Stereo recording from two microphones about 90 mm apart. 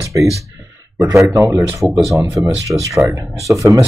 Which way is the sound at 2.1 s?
35° right (ahead or behind).